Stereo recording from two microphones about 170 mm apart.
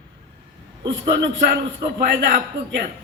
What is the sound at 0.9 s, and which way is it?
A man's voice, 90° right.